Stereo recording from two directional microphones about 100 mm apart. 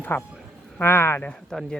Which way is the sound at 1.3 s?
5° left (ahead or behind).